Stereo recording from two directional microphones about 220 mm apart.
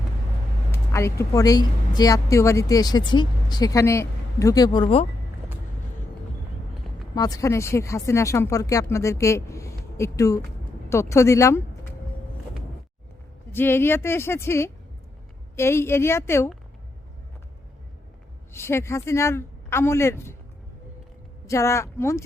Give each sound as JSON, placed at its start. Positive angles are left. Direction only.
{"t": 0.9, "sound": "speech", "side_deg": 10}
{"t": 7.2, "sound": "speech", "side_deg": 15}
{"t": 13.5, "sound": "speech", "side_deg": 10}
{"t": 18.5, "sound": "speech", "side_deg": 10}
{"t": 21.4, "sound": "speech", "side_deg": 15}